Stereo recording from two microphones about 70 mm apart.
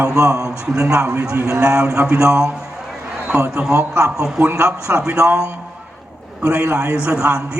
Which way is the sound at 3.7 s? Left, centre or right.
Right.